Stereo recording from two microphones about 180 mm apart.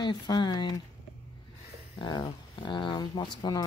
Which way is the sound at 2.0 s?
25° left (ahead or behind).